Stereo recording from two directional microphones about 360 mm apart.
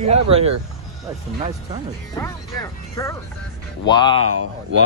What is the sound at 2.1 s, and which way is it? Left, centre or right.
Speech, centre.